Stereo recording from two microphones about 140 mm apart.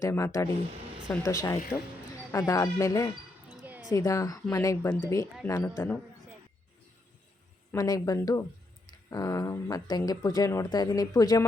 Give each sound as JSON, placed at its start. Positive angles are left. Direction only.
{"t": 0.0, "sound": "speech", "side_deg": 20}
{"t": 7.7, "sound": "speech", "side_deg": 25}